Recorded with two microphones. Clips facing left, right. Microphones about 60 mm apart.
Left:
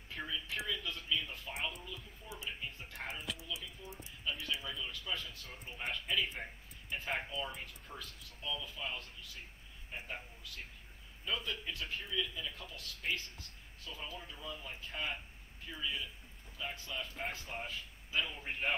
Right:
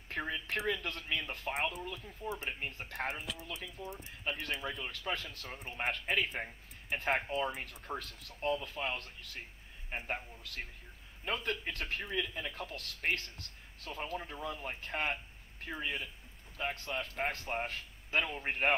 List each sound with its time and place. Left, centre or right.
0.1 s speech: right
3.3 s speech: right
3.6 s speech: right